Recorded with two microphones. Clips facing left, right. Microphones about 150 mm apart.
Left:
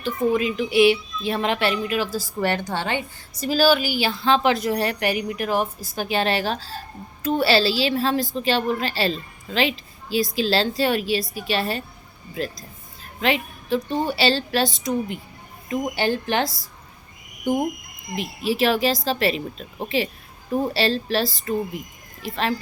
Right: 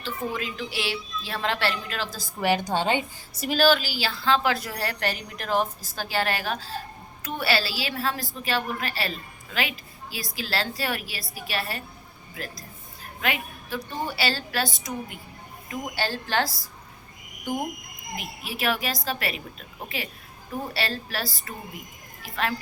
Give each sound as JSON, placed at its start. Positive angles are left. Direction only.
{"t": 0.0, "sound": "speech", "side_deg": 15}
{"t": 2.4, "sound": "a woman's voice", "side_deg": -10}
{"t": 3.4, "sound": "a woman's voice", "side_deg": 5}
{"t": 18.2, "sound": "a woman's voice", "side_deg": 30}